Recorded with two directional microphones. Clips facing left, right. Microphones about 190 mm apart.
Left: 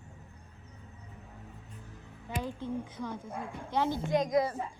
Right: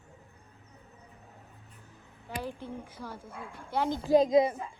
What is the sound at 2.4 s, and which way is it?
A woman's voice, 10° right (ahead or behind).